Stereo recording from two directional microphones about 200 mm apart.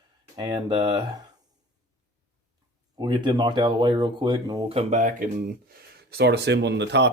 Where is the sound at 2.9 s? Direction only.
20° right (ahead or behind); by 5.2 s 40° right (ahead or behind).